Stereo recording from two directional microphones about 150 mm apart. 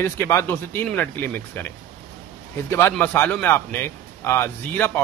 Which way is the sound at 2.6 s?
15° left (ahead or behind).